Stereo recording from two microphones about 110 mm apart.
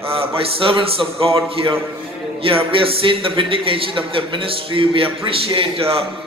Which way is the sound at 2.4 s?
55° right (ahead or behind).